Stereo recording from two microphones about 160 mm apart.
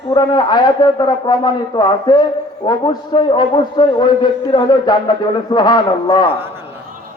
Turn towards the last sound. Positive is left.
turn(degrees=25)  # may be behind; listen again after turning